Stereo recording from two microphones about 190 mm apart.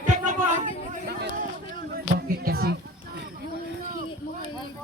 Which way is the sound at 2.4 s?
55° right (ahead or behind).